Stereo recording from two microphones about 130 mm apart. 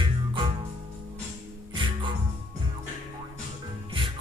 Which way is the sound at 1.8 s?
40° right (ahead or behind).